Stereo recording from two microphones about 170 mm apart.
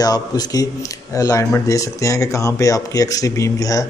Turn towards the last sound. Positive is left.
turn(degrees=20)  # may be behind; listen again after turning